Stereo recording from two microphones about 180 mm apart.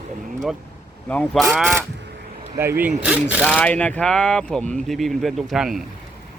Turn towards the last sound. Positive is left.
turn(degrees=0)  # may be behind; listen again after turning